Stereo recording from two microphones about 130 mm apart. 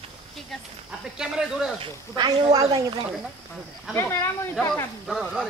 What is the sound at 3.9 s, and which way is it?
Speech, 20° left (ahead or behind).